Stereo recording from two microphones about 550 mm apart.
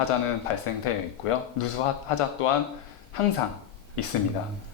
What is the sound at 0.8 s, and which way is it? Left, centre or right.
Speech, left.